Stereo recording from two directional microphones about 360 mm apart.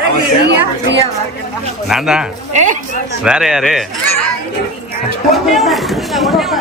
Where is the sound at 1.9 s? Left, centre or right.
Centre.